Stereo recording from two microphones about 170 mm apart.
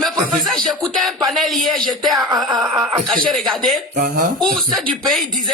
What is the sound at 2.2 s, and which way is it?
Music, 20° right (ahead or behind).